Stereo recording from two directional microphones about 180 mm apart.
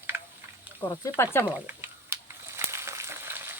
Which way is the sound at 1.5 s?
10° right (ahead or behind).